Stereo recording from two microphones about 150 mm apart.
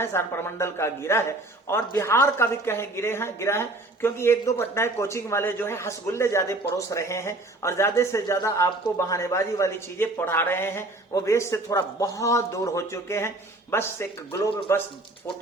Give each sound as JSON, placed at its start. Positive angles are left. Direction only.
{"t": 0.0, "sound": "speech", "side_deg": 15}